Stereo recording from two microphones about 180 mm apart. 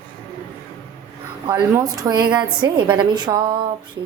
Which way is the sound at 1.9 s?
20° right (ahead or behind).